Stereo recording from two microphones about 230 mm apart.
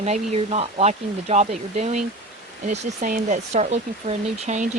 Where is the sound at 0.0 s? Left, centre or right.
Right.